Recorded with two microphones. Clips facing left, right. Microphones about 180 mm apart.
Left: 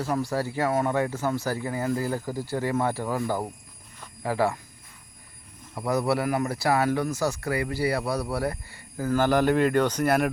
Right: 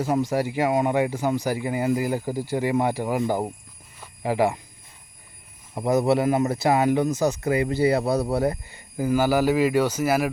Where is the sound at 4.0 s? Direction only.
15° right (ahead or behind).